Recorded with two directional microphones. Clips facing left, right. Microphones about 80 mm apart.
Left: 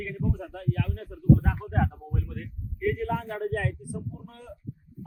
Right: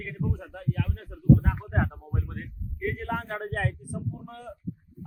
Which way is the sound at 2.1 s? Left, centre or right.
Right.